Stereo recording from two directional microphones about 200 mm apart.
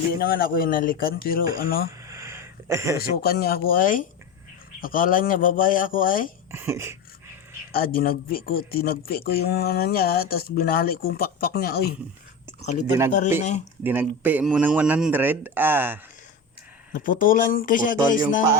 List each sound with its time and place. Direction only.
0.1 s speech: 50° left (ahead or behind)
2.0 s a sound: 15° right (ahead or behind)
3.0 s speech: 50° left (ahead or behind)
6.5 s speech: 15° right (ahead or behind)
7.7 s speech: 45° left (ahead or behind)
13.1 s speech: 40° left (ahead or behind)
13.8 s speech: 10° right (ahead or behind)
16.9 s speech: 45° left (ahead or behind)